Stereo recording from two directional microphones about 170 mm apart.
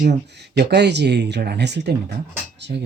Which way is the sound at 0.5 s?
80° right.